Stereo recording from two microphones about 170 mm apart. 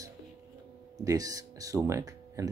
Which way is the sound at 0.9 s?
20° right (ahead or behind).